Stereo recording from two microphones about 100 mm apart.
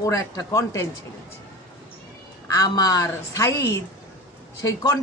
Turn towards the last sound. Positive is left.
turn(degrees=40)  # may be behind; listen again after turning